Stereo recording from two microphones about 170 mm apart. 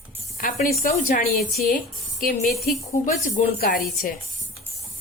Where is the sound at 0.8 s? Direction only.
55° left (ahead or behind).